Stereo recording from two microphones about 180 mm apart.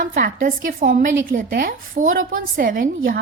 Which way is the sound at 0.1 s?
50° right (ahead or behind).